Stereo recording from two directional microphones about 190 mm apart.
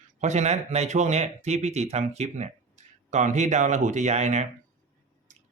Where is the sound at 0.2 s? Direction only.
35° right (ahead or behind).